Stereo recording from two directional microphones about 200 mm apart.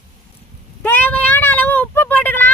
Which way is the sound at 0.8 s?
10° left (ahead or behind).